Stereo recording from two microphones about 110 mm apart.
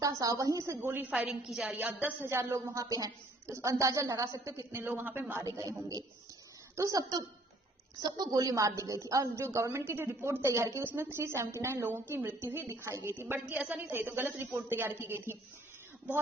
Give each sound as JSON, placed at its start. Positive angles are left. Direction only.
{"t": 0.0, "sound": "a woman's voice", "side_deg": -30}
{"t": 5.3, "sound": "a woman's voice", "side_deg": -30}